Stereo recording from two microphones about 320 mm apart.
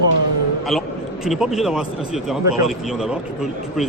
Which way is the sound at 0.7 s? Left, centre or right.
Centre.